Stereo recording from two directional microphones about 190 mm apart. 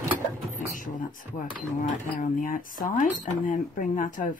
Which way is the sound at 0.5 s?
45° left (ahead or behind).